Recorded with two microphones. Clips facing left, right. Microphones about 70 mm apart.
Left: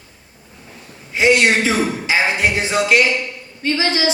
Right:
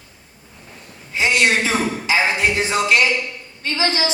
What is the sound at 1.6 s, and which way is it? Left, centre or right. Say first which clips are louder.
Speech: left 2 dB; right.